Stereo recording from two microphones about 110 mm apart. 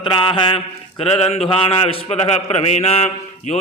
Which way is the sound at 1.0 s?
65° left (ahead or behind).